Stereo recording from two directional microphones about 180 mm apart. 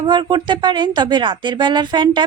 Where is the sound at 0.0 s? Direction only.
25° right (ahead or behind).